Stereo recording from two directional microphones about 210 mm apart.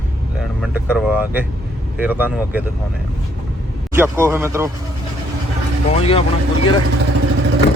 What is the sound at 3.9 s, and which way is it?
Speech, 10° right (ahead or behind).